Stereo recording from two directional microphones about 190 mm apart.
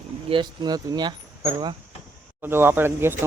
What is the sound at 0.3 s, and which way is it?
Speech, 25° right (ahead or behind).